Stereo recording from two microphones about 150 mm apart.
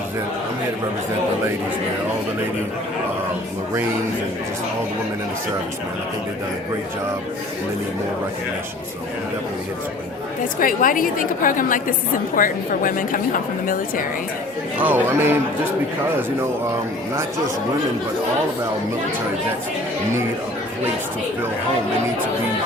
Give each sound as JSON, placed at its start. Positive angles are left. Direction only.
{"t": 10.6, "sound": "a woman's voice", "side_deg": 65}
{"t": 14.8, "sound": "speech", "side_deg": -10}